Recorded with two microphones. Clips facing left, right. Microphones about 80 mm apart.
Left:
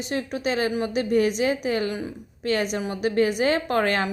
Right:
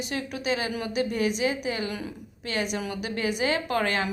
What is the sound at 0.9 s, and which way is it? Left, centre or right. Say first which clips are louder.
A woman's voice: left 4 dB; left.